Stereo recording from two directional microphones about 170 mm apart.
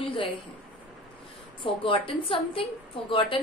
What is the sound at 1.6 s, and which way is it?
A woman's voice, 30° left (ahead or behind).